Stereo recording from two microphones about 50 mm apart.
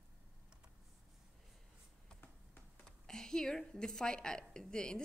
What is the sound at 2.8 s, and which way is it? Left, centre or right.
A woman's voice, centre.